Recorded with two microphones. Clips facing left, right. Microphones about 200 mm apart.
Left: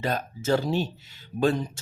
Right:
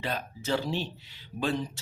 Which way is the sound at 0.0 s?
45° left (ahead or behind).